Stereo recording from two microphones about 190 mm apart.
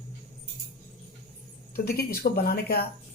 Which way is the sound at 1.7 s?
55° left (ahead or behind).